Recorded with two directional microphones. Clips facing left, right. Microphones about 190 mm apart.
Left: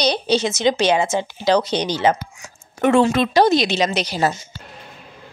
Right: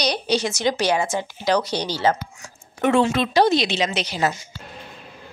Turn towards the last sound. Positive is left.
turn(degrees=35)  # may be behind; listen again after turning